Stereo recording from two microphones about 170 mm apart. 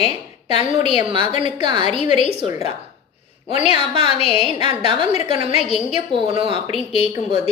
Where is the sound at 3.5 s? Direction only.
35° left (ahead or behind).